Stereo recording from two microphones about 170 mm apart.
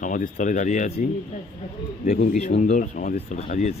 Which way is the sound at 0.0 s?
50° left (ahead or behind).